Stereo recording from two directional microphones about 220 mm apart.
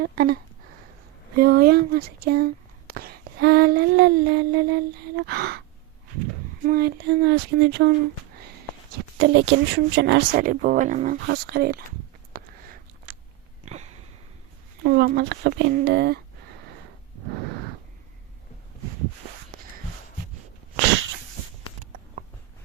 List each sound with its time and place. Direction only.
0.0 s speech: 45° right (ahead or behind)
1.4 s speech: 45° right (ahead or behind)
6.7 s speech: 45° right (ahead or behind)
9.1 s speech: 55° right (ahead or behind); by 11.2 s 35° right (ahead or behind)
11.3 s speech: 45° right (ahead or behind)
12.3 s a sound: 40° right (ahead or behind)
13.1 s biting: 40° right (ahead or behind)
13.7 s a sound: 30° right (ahead or behind)
14.8 s speech: 45° right (ahead or behind)